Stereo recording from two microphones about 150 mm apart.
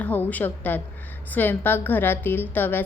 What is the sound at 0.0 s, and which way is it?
A woman's voice, 10° left (ahead or behind).